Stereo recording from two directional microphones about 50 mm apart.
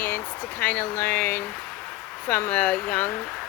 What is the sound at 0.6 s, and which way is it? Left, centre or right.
Speech, left.